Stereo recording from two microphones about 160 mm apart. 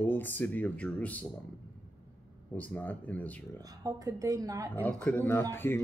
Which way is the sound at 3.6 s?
25° right (ahead or behind).